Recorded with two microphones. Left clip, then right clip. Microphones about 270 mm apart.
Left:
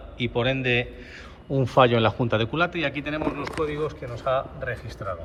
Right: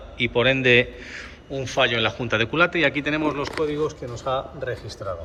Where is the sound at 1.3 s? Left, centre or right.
Centre.